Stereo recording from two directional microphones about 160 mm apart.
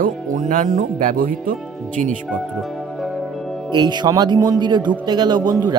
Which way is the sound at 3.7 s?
25° right (ahead or behind).